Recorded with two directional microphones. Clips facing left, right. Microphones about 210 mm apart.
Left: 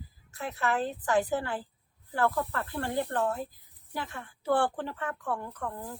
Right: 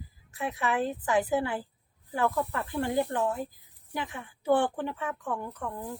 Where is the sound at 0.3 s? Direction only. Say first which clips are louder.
Right 1 dB; 15° right (ahead or behind).